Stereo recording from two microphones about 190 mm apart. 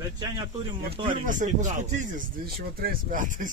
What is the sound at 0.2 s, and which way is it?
Speech, 25° right (ahead or behind).